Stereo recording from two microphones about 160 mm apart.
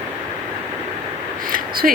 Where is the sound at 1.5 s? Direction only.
65° right (ahead or behind).